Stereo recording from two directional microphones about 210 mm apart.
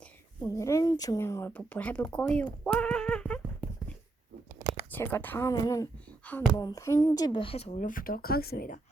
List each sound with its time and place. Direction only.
0.4 s speech: 15° left (ahead or behind)
4.9 s speech: 10° left (ahead or behind); by 8.8 s 45° left (ahead or behind)